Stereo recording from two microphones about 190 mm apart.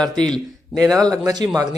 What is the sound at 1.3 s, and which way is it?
Speech, 20° right (ahead or behind).